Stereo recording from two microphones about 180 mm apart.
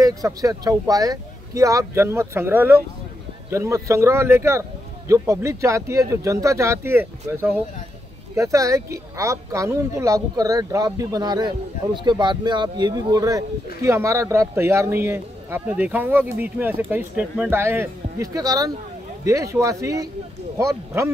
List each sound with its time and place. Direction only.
0.0 s speech: 20° right (ahead or behind)